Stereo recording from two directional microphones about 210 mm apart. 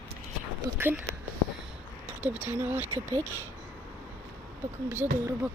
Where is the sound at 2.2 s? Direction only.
5° right (ahead or behind).